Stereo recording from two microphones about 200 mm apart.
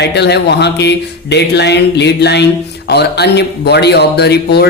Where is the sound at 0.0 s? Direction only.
55° left (ahead or behind).